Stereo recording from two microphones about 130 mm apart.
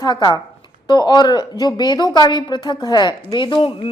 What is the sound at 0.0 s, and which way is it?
A woman's voice, 30° left (ahead or behind).